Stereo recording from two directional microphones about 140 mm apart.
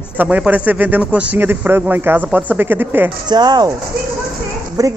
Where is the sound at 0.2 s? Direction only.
10° right (ahead or behind).